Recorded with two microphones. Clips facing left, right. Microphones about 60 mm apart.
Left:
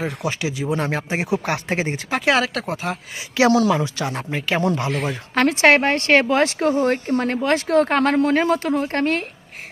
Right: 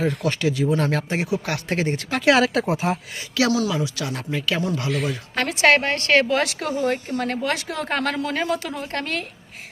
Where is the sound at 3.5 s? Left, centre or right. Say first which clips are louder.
Left 5 dB; left.